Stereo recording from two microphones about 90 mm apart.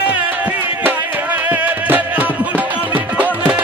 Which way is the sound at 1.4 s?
20° right (ahead or behind).